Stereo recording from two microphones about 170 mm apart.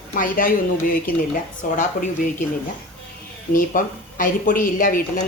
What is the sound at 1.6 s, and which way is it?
Speech, 50° left (ahead or behind).